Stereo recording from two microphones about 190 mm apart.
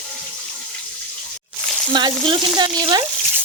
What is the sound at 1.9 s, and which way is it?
Frying, 25° right (ahead or behind).